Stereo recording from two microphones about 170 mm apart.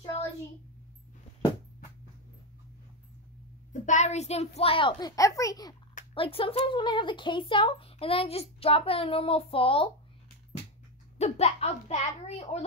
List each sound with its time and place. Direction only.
3.8 s speech: 45° left (ahead or behind); by 5.8 s 20° left (ahead or behind)
6.1 s speech: 35° left (ahead or behind)
11.1 s speech: 40° left (ahead or behind)